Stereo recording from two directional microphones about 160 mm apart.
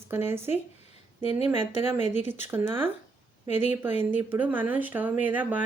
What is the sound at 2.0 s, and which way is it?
Speech, 45° left (ahead or behind).